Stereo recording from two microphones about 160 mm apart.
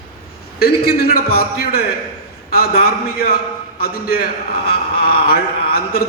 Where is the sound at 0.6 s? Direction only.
70° left (ahead or behind).